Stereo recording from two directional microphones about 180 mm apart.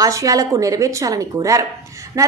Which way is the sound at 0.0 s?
20° right (ahead or behind).